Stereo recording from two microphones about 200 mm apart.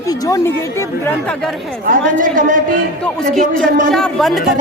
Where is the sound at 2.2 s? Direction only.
40° right (ahead or behind).